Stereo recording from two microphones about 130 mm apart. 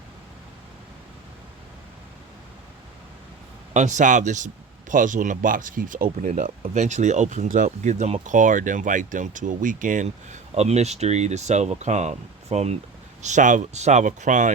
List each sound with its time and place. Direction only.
3.8 s speech: 70° right (ahead or behind)
6.7 s speech: 65° right (ahead or behind)
13.2 s speech: 70° right (ahead or behind)